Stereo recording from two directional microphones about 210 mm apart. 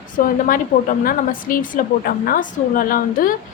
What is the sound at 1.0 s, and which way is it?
A woman's voice, 40° left (ahead or behind).